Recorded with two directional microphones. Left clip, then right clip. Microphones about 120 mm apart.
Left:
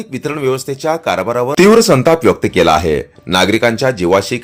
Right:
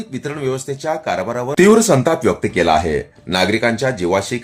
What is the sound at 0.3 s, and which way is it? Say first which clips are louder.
Speech: left 5 dB; 40° left (ahead or behind).